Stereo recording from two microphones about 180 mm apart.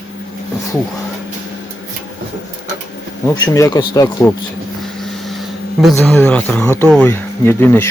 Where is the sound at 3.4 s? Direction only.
15° left (ahead or behind).